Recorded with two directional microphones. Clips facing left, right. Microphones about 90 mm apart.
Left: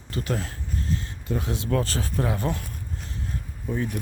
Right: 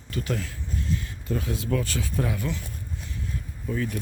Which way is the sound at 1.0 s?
25° left (ahead or behind).